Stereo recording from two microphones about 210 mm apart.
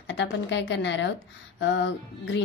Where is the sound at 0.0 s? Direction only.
60° left (ahead or behind).